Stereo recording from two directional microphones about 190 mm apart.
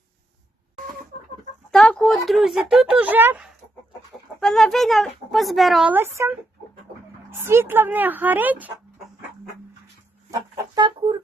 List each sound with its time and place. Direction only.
1.7 s speech: 5° left (ahead or behind); by 6.3 s 10° right (ahead or behind)
7.4 s a woman's voice: 15° right (ahead or behind)
10.8 s speech: 25° right (ahead or behind)